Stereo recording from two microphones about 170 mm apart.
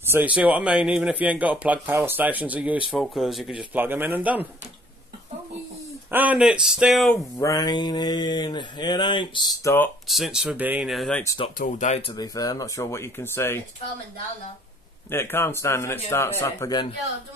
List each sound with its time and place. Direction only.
0.0 s speech: 10° right (ahead or behind)
6.0 s speech: 10° right (ahead or behind)
7.3 s mantra: 20° left (ahead or behind)
10.0 s speech: centre (ahead or behind)
11.5 s speech: 50° left (ahead or behind)
12.1 s speech: 20° left (ahead or behind)
15.0 s speech: 15° left (ahead or behind)